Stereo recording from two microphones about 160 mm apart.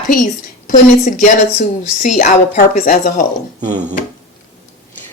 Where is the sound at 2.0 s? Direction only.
45° left (ahead or behind).